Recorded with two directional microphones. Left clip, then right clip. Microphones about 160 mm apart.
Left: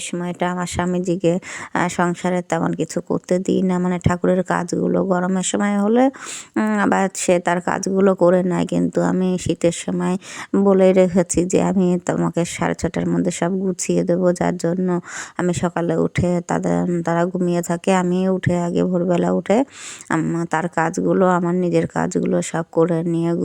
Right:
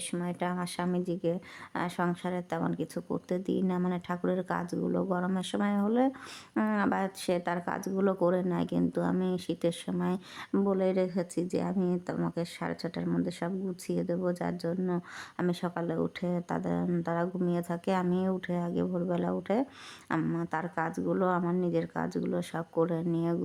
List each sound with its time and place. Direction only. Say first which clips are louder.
0.1 s speech: left 11 dB; 30° left (ahead or behind)
6.7 s speech: left 15 dB; 35° left (ahead or behind)